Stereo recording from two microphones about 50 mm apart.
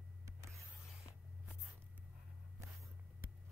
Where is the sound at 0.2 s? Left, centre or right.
Right.